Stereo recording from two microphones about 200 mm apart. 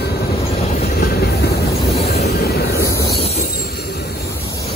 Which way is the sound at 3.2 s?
30° left (ahead or behind).